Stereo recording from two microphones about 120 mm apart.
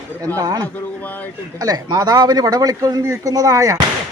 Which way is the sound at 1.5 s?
35° right (ahead or behind).